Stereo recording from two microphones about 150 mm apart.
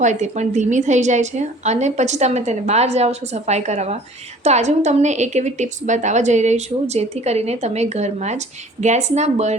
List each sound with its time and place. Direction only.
0.0 s a woman's voice: 50° right (ahead or behind)